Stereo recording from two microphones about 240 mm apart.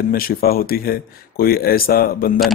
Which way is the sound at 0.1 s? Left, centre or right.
Left.